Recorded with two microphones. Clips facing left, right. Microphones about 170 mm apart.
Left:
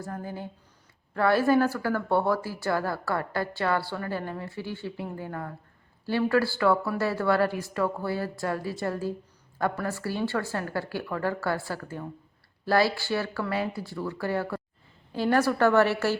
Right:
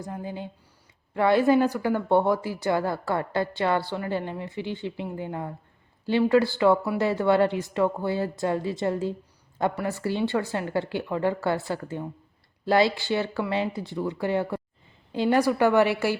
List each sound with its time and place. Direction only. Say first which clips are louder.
0.0 s a woman's voice: right 1 dB; 15° right (ahead or behind)